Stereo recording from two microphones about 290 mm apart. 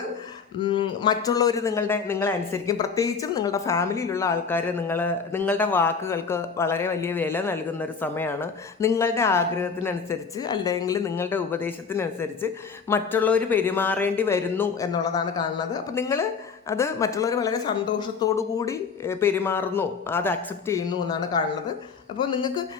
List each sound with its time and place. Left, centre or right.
0.6 s speech: centre